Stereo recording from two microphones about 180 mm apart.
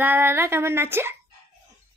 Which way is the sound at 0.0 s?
10° right (ahead or behind).